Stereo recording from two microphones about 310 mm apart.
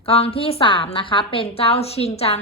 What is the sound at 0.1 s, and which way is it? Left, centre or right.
A woman's voice, centre.